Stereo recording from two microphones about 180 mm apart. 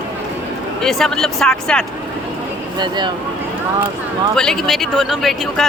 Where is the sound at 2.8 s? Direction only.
25° right (ahead or behind).